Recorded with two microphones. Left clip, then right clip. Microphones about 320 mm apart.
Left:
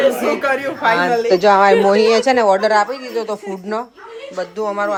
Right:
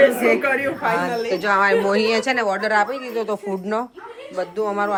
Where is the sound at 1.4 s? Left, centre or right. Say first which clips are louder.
Left 6 dB; centre.